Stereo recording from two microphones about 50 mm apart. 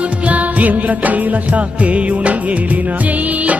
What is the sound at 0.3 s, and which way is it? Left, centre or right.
Music, right.